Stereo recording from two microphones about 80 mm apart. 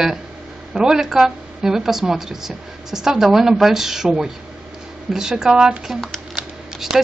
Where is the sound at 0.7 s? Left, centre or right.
Centre.